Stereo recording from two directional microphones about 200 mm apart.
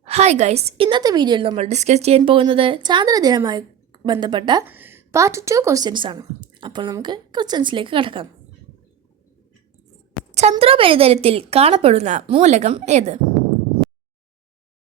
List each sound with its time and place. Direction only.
0.0 s a woman's voice: 35° right (ahead or behind)
4.6 s a woman's voice: 10° right (ahead or behind); by 8.3 s 25° right (ahead or behind)
10.5 s a woman's voice: 25° right (ahead or behind)